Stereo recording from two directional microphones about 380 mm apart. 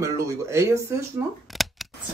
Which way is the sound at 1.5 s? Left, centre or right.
Centre.